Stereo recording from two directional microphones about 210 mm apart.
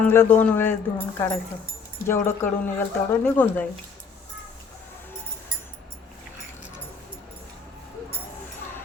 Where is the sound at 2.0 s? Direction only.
10° left (ahead or behind).